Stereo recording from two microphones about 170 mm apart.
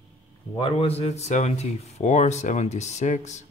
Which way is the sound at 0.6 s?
30° left (ahead or behind).